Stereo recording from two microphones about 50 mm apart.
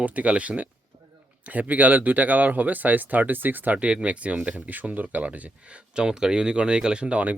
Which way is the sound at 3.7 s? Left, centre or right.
Right.